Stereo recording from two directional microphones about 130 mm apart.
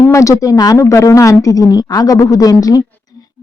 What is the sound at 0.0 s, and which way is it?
A woman's voice, 25° left (ahead or behind).